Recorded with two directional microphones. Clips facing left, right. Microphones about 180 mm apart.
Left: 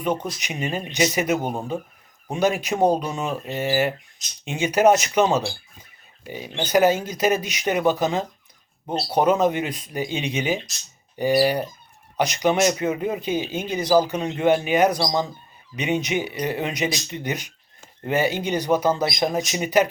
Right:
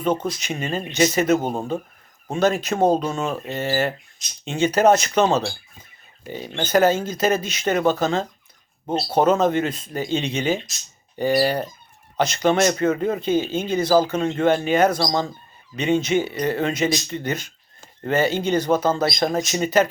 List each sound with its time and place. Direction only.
0.0 s speech: 15° left (ahead or behind)